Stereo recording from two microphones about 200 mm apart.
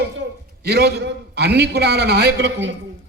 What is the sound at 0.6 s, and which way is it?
A man's voice, 55° right (ahead or behind).